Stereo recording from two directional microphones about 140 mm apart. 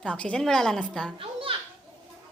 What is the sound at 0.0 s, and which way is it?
A woman's voice, 10° left (ahead or behind).